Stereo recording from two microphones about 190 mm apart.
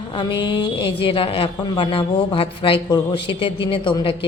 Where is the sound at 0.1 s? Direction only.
25° left (ahead or behind).